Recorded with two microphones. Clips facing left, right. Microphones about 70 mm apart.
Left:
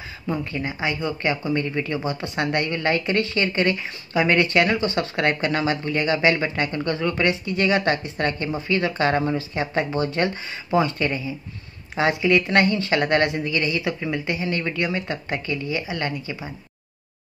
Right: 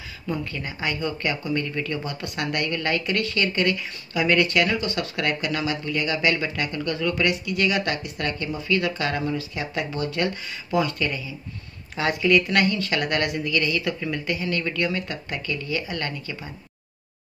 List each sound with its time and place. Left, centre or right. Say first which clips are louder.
0.3 s speech: left 3 dB; left